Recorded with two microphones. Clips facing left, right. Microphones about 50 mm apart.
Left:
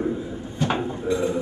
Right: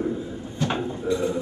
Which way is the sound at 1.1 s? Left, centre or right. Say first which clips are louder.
Left 1 dB; left.